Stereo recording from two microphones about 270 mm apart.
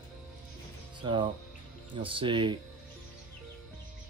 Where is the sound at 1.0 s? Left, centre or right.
Centre.